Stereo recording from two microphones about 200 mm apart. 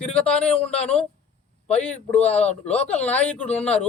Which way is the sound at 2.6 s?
30° left (ahead or behind).